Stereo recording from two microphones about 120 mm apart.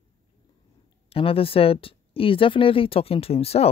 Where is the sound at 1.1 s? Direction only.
50° left (ahead or behind).